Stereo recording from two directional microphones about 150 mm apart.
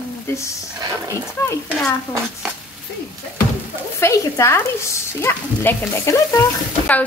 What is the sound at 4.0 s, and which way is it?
Speech, 20° left (ahead or behind).